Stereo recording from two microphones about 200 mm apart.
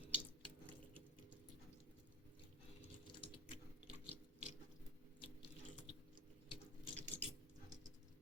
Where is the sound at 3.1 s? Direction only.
25° left (ahead or behind).